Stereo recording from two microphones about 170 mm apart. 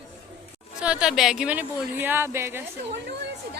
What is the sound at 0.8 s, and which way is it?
Speech, 5° right (ahead or behind).